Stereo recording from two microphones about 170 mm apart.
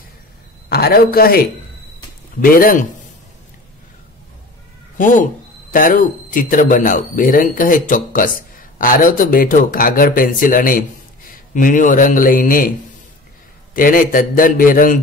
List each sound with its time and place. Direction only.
0.7 s a man's voice: 65° left (ahead or behind)
2.4 s a man's voice: 55° left (ahead or behind)
4.9 s a man's voice: 50° left (ahead or behind)
13.7 s a man's voice: 55° left (ahead or behind)